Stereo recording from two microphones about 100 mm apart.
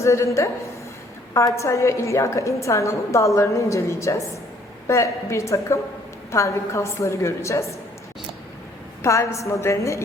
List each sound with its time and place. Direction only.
0.0 s a woman's voice: 30° left (ahead or behind)
1.5 s a woman's voice: 30° left (ahead or behind)
9.0 s a woman's voice: 30° left (ahead or behind)